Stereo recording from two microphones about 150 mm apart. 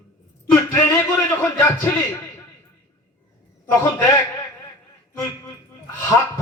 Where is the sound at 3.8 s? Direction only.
15° left (ahead or behind).